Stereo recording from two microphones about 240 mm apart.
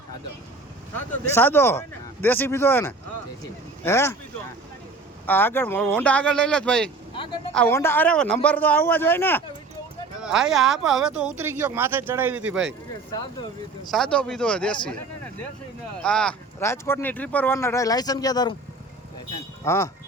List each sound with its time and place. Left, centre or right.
0.9 s speech: centre
5.2 s speech: centre
7.1 s speech: left
7.5 s speech: centre
10.2 s speech: centre
13.9 s speech: centre
19.6 s speech: centre